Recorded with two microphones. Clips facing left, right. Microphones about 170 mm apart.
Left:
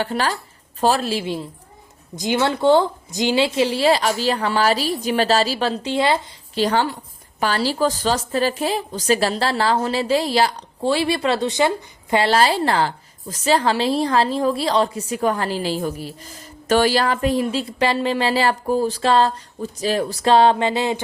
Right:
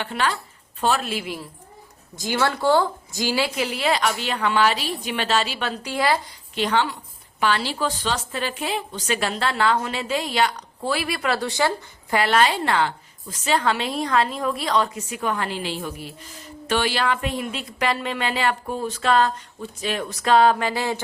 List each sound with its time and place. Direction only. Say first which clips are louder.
0.0 s a woman's voice: left 3 dB; 40° left (ahead or behind)
6.5 s a woman's voice: left 3 dB; 35° left (ahead or behind); by 11.7 s 20° left (ahead or behind)
12.1 s a woman's voice: left 3 dB; 30° left (ahead or behind)